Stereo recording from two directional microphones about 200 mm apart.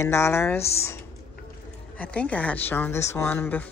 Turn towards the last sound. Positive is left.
turn(degrees=10)  # may be behind; listen again after turning